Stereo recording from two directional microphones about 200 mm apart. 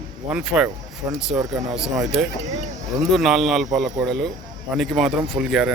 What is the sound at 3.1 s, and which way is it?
Speech, centre (ahead or behind).